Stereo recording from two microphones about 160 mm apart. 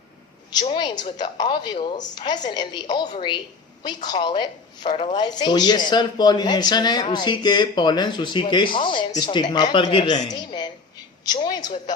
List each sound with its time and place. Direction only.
0.7 s speech: 30° left (ahead or behind)